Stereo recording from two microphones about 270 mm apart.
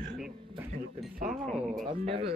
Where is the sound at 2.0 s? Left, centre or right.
Right.